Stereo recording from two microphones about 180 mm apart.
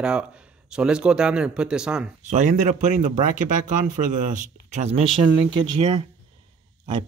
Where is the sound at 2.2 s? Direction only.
45° right (ahead or behind).